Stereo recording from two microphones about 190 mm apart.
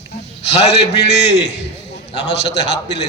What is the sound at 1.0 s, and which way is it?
A man's voice, 65° left (ahead or behind).